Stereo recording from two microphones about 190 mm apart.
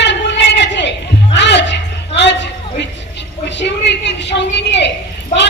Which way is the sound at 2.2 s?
65° left (ahead or behind).